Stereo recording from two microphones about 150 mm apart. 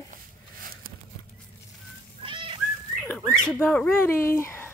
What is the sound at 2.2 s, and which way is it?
Cat, 35° right (ahead or behind).